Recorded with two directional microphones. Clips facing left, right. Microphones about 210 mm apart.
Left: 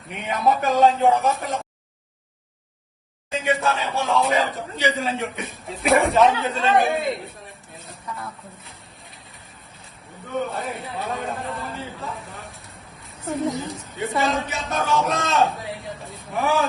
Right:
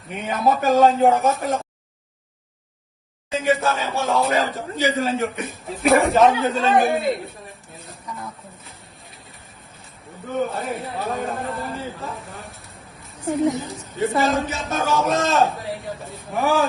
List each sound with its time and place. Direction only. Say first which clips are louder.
0.1 s a man's voice: right 1 dB; centre (ahead or behind)
3.3 s a man's voice: right 2 dB; centre (ahead or behind)
10.4 s a man's voice: right 3 dB; centre (ahead or behind)